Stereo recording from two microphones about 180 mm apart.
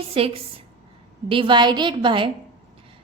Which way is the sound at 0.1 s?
30° right (ahead or behind).